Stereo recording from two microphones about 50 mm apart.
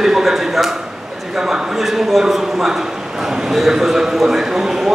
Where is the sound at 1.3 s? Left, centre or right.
Centre.